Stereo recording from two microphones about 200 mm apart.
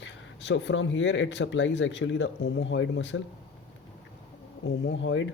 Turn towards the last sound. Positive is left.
turn(degrees=70)  # may be behind; listen again after turning